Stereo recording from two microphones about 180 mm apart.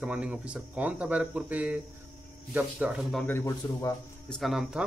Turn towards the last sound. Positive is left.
turn(degrees=0)  # may be behind; listen again after turning